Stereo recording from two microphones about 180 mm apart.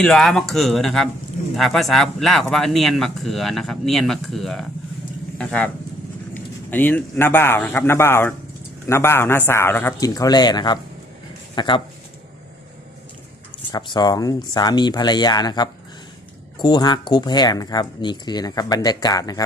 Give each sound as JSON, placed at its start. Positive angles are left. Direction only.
{"t": 0.0, "sound": "a man's voice", "side_deg": 5}
{"t": 13.7, "sound": "speech", "side_deg": 25}